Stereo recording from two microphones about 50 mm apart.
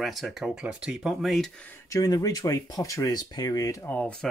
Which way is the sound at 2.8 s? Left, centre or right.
Left.